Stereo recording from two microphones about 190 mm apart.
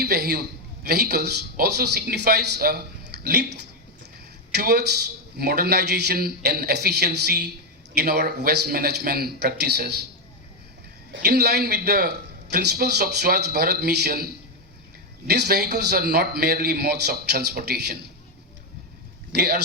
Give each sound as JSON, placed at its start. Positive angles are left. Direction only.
{"t": 0.0, "sound": "a sound", "side_deg": -55}
{"t": 0.9, "sound": "a man's voice", "side_deg": -60}
{"t": 11.1, "sound": "a man's voice", "side_deg": -60}
{"t": 15.3, "sound": "a man's voice", "side_deg": -60}
{"t": 19.3, "sound": "speech", "side_deg": -55}